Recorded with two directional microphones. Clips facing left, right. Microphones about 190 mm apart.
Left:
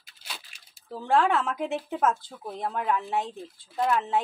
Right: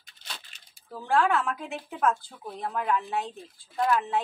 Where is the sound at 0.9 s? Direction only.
25° left (ahead or behind).